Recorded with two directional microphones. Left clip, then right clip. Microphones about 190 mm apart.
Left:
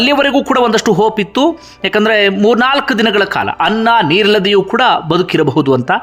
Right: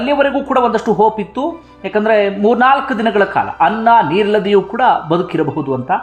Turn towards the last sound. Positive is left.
turn(degrees=20)  # may be behind; listen again after turning